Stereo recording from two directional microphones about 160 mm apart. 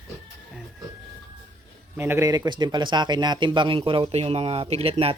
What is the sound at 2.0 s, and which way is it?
A man's voice, 15° right (ahead or behind).